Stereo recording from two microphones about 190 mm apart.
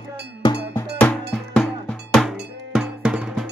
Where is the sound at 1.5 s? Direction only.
5° left (ahead or behind).